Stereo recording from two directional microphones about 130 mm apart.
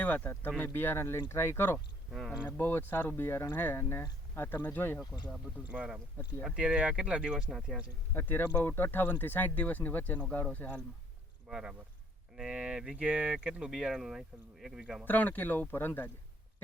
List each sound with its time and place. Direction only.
0.0 s speech: 15° left (ahead or behind)
2.0 s speech: centre (ahead or behind)
2.4 s speech: 15° left (ahead or behind)
5.6 s speech: 5° right (ahead or behind)
8.1 s speech: 15° left (ahead or behind)
11.4 s speech: 5° right (ahead or behind)
15.0 s speech: 15° left (ahead or behind)